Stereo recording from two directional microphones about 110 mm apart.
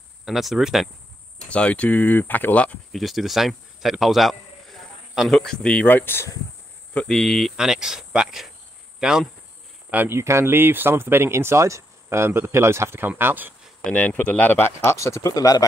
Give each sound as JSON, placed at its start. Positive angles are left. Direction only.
{"t": 0.2, "sound": "speech", "side_deg": 0}
{"t": 1.4, "sound": "speech", "side_deg": 10}
{"t": 2.9, "sound": "speech", "side_deg": 0}
{"t": 7.2, "sound": "speech", "side_deg": 0}
{"t": 9.8, "sound": "speech", "side_deg": -20}
{"t": 13.8, "sound": "speech", "side_deg": 15}